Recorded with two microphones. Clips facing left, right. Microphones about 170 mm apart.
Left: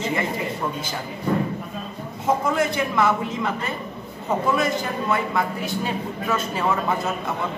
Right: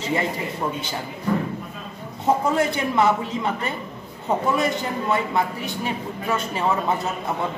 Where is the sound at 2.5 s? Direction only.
25° right (ahead or behind).